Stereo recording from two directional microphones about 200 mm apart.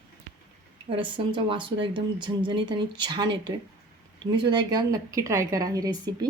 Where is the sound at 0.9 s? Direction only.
25° right (ahead or behind).